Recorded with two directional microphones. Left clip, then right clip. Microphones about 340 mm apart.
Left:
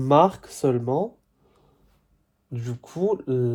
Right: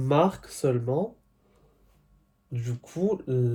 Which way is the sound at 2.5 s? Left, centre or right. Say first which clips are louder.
Left 3 dB; centre.